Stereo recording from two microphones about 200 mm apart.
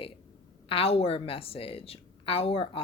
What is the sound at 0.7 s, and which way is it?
Speech, 30° left (ahead or behind).